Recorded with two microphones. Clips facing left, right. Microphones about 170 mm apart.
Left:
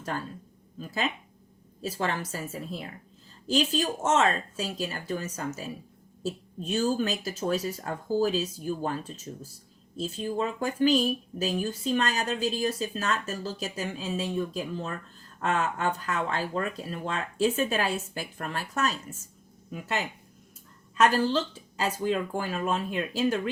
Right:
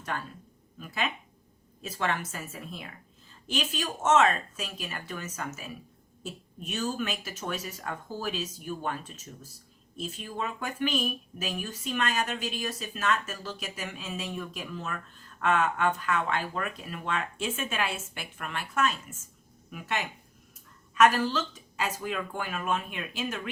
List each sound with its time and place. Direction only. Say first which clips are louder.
0.8 s speech: left 2 dB; 35° left (ahead or behind)